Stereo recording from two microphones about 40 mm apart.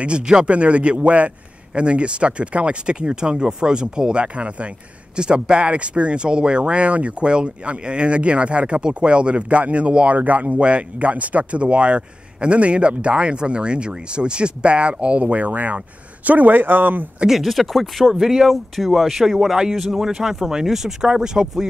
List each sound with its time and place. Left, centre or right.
0.0 s speech: right
0.5 s a man's voice: right
10.1 s speech: right
17.3 s speech: centre
18.2 s speech: centre
21.1 s speech: centre